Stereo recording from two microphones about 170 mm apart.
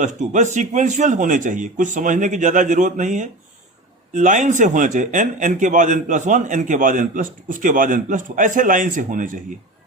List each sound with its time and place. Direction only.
0.0 s speech: 45° right (ahead or behind)